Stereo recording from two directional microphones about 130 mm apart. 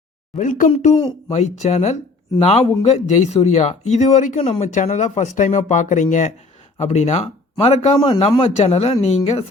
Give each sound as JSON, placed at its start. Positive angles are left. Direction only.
{"t": 0.3, "sound": "a man's voice", "side_deg": 85}
{"t": 2.4, "sound": "a man's voice", "side_deg": 50}
{"t": 4.4, "sound": "speech", "side_deg": 60}
{"t": 6.7, "sound": "speech", "side_deg": 55}
{"t": 7.9, "sound": "speech", "side_deg": 30}
{"t": 8.2, "sound": "a man's voice", "side_deg": 55}